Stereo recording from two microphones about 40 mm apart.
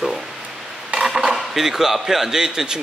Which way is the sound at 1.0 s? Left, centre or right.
Centre.